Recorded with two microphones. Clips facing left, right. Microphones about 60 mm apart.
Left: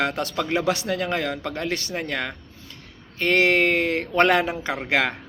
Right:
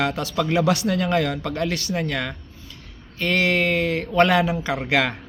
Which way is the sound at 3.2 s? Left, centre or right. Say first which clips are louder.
Left 2 dB; left.